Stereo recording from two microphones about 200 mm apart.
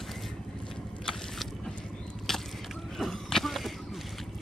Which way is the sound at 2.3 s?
Centre (ahead or behind).